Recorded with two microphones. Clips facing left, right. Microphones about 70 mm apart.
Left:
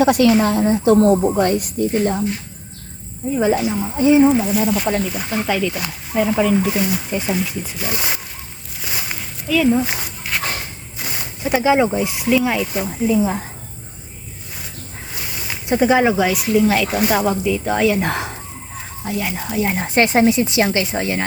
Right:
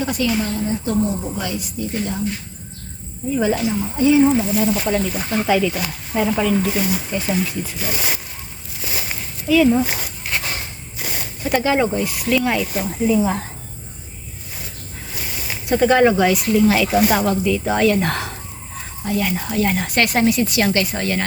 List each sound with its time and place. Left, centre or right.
0.0 s speech: left
1.3 s speech: left
3.3 s a woman's voice: left
7.2 s a woman's voice: centre
9.5 s speech: centre
11.4 s speech: centre
12.4 s speech: centre
15.6 s speech: centre
17.9 s a woman's voice: centre